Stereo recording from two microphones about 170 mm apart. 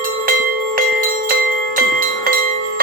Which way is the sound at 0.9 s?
55° right (ahead or behind).